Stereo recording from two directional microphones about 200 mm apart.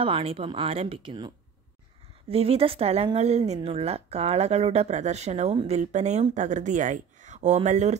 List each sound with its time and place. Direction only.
0.0 s a woman's voice: 25° right (ahead or behind)